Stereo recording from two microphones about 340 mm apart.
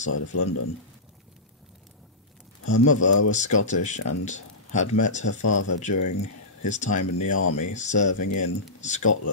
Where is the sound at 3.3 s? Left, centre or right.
Left.